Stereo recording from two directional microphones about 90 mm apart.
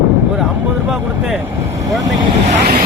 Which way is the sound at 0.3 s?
20° right (ahead or behind).